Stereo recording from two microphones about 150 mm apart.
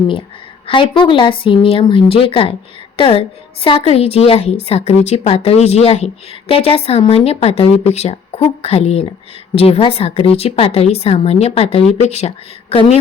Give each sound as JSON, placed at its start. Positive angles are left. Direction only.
{"t": 0.7, "sound": "a woman's voice", "side_deg": 35}